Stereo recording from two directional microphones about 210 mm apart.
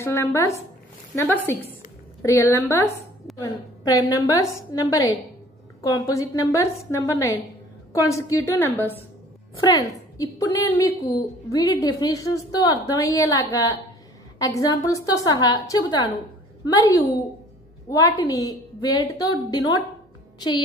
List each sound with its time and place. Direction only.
0.0 s a woman's voice: 15° left (ahead or behind)